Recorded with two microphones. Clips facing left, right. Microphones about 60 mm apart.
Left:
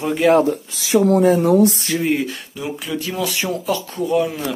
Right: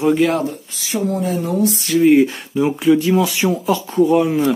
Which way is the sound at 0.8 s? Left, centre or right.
Left.